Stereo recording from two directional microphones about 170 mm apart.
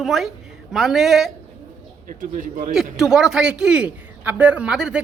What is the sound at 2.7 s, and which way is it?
A man's voice, 5° right (ahead or behind).